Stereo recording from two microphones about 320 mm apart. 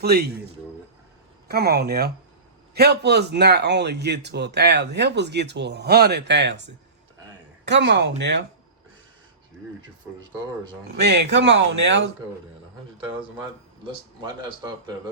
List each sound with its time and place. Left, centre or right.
0.0 s speech: right
1.5 s a man's voice: right
11.0 s a man's voice: right